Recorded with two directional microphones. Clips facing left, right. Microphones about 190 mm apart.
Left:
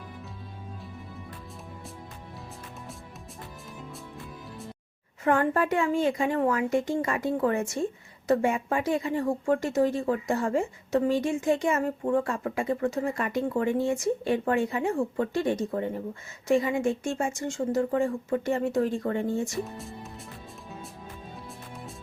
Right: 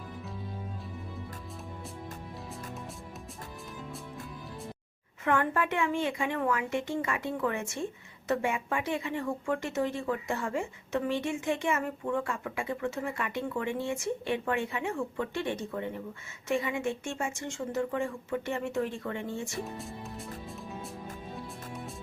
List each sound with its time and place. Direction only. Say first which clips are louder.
5.2 s a woman's voice: left 4 dB; 35° left (ahead or behind)